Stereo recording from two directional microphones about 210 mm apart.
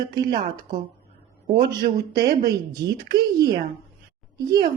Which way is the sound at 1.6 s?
50° right (ahead or behind).